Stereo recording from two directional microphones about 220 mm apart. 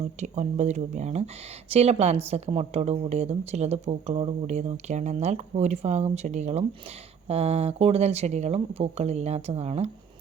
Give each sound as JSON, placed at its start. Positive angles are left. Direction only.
{"t": 0.0, "sound": "a woman's voice", "side_deg": -30}